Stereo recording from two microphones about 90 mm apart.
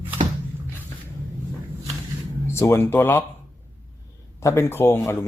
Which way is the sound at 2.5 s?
30° left (ahead or behind).